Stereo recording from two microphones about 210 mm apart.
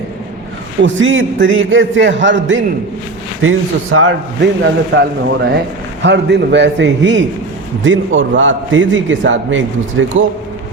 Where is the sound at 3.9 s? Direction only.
75° right (ahead or behind).